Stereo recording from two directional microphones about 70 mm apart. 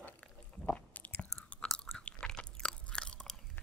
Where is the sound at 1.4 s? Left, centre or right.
Centre.